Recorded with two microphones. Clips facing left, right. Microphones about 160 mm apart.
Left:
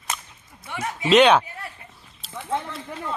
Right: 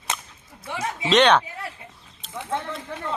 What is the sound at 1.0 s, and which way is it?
Speech, 5° left (ahead or behind).